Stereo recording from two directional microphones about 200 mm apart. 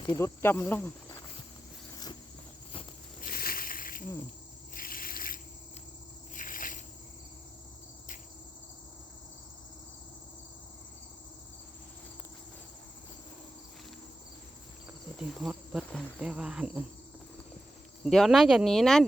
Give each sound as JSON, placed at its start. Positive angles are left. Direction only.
{"t": 0.0, "sound": "speech", "side_deg": 20}
{"t": 0.4, "sound": "speech", "side_deg": 10}
{"t": 3.2, "sound": "a sound", "side_deg": 45}
{"t": 15.2, "sound": "insect", "side_deg": 0}
{"t": 18.0, "sound": "speech", "side_deg": 0}